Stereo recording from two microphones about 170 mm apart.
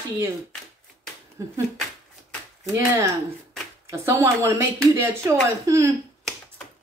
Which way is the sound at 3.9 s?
15° right (ahead or behind).